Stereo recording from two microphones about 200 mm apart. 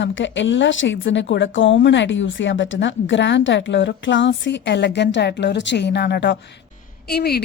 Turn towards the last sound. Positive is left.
turn(degrees=50)  # may be behind; listen again after turning